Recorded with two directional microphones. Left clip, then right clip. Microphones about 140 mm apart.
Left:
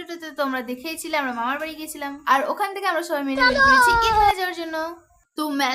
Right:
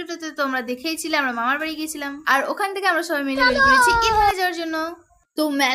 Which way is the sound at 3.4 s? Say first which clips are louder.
Even; centre (ahead or behind).